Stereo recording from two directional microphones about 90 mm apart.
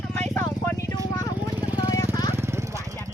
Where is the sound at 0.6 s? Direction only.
30° left (ahead or behind).